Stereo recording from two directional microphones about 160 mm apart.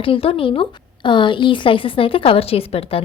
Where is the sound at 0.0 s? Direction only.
35° left (ahead or behind).